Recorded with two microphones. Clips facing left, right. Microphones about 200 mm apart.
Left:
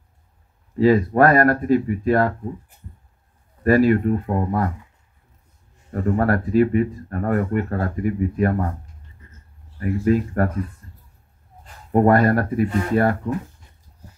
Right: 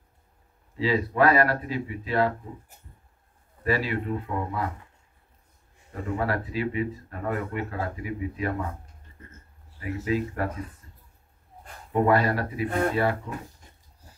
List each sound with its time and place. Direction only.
0.7 s speech: 50° left (ahead or behind)
3.6 s speech: 50° left (ahead or behind)
6.0 s speech: 50° left (ahead or behind)
10.0 s speech: 50° left (ahead or behind)
11.9 s speech: 50° left (ahead or behind)
12.6 s speech: 55° right (ahead or behind)
12.9 s speech: 50° left (ahead or behind)